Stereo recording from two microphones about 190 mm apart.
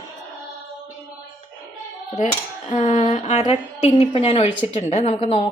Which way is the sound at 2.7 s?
35° left (ahead or behind).